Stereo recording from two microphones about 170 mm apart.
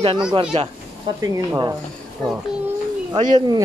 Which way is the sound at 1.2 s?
20° right (ahead or behind).